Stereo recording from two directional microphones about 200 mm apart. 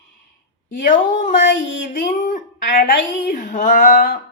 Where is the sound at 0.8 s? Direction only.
40° left (ahead or behind).